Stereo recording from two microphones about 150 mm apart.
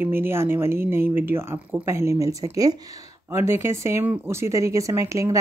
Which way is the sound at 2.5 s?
25° right (ahead or behind).